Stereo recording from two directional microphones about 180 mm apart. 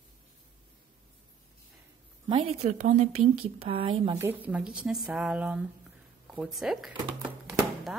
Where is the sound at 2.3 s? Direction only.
30° right (ahead or behind).